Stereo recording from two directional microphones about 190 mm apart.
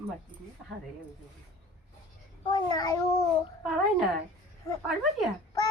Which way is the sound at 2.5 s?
20° left (ahead or behind).